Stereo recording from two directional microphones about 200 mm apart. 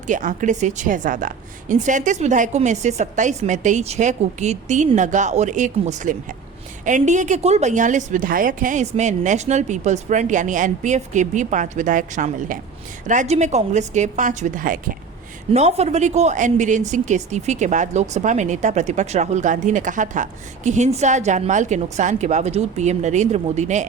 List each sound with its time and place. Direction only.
0.1 s speech: 40° right (ahead or behind)